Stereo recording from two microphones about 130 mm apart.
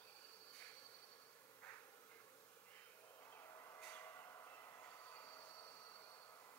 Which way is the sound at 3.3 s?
20° left (ahead or behind).